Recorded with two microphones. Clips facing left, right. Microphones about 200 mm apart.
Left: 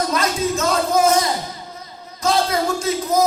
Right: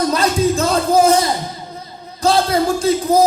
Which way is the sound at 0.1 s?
30° right (ahead or behind).